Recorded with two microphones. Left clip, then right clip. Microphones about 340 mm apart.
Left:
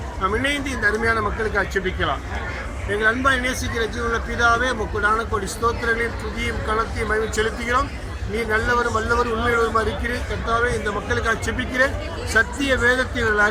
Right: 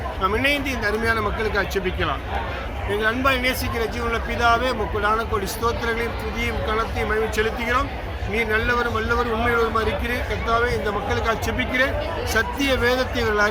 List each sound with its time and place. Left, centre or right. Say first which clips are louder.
0.2 s speech: right 1 dB; centre
10.5 s speech: even; centre